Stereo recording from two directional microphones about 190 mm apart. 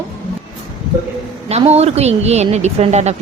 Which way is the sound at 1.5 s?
35° right (ahead or behind).